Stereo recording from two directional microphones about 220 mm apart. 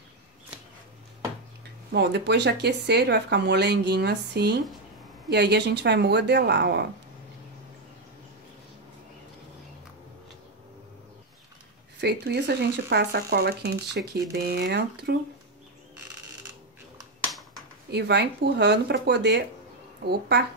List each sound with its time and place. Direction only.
1.9 s speech: 50° right (ahead or behind)
12.0 s speech: 50° right (ahead or behind)
17.9 s speech: 50° right (ahead or behind)